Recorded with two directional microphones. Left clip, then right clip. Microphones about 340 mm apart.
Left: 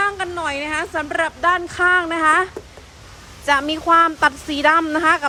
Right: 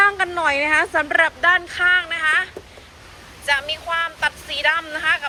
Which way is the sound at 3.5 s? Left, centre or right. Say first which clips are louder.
Left 5 dB; left.